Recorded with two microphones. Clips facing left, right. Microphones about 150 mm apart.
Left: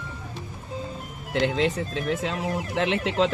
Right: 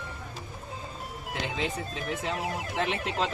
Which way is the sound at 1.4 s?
85° left.